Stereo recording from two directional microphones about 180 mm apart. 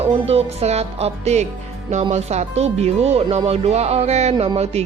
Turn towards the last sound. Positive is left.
turn(degrees=-35)  # may be behind; listen again after turning